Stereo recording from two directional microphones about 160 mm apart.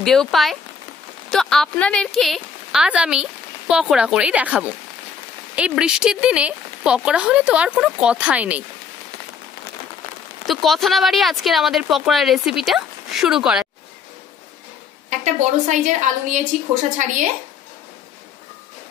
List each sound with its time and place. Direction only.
0.0 s speech: centre (ahead or behind)
10.4 s speech: centre (ahead or behind)
15.0 s a woman's voice: 50° right (ahead or behind)